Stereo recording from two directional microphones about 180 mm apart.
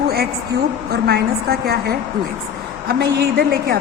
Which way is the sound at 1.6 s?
60° right (ahead or behind).